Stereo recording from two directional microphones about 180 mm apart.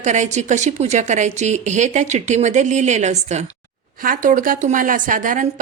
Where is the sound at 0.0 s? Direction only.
40° right (ahead or behind).